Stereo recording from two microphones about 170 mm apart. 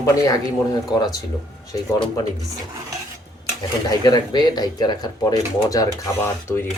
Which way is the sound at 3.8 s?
25° left (ahead or behind).